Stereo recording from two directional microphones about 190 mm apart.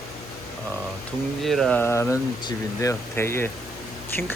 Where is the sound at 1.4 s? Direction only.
Centre (ahead or behind).